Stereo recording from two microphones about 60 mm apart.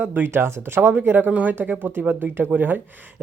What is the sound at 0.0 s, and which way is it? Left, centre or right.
Speech, right.